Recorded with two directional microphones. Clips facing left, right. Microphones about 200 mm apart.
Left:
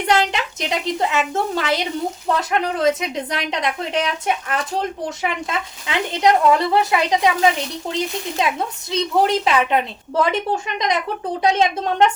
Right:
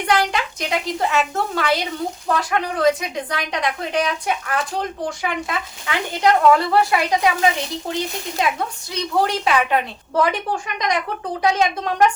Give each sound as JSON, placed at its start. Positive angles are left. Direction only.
{"t": 0.1, "sound": "speech", "side_deg": 20}
{"t": 8.4, "sound": "speech", "side_deg": 25}